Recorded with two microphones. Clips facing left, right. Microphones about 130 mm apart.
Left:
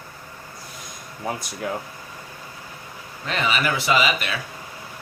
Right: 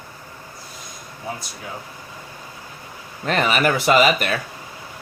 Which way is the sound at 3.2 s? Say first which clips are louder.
Right 5 dB; 50° right (ahead or behind).